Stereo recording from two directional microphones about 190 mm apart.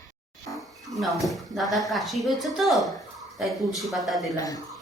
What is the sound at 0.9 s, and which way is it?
Speech, centre (ahead or behind).